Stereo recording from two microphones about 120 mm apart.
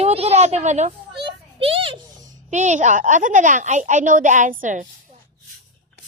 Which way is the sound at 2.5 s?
85° right.